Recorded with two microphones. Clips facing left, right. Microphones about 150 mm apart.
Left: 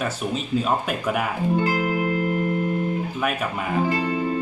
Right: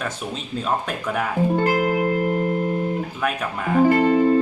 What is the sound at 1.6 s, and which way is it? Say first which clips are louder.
Music: right 3 dB; 45° right (ahead or behind).